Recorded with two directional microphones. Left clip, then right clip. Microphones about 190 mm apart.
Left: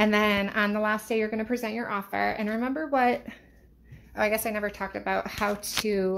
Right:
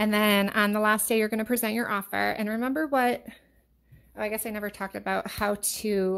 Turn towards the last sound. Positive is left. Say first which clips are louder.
# left 1 dB
turn(degrees=-40)  # may be behind; listen again after turning